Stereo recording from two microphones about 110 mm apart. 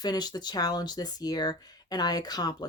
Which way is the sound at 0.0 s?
40° left (ahead or behind).